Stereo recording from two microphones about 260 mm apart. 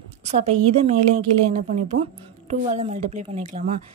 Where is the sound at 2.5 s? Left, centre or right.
Right.